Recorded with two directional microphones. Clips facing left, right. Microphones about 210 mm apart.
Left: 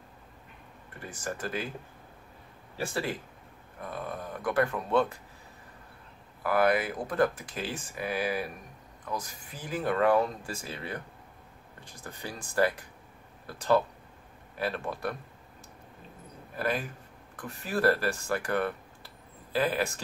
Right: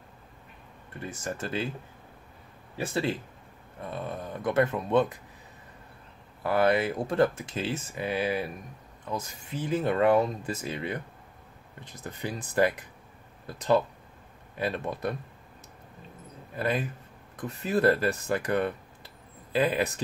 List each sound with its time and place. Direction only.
1.0 s speech: 25° right (ahead or behind)
2.8 s speech: 20° right (ahead or behind)
6.4 s speech: 25° right (ahead or behind)
14.6 s speech: 20° right (ahead or behind)
16.5 s speech: 20° right (ahead or behind)